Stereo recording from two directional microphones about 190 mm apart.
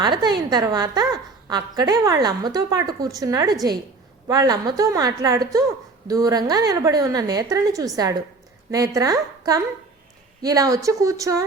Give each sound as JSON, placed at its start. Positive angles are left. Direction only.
{"t": 0.0, "sound": "a woman's voice", "side_deg": -20}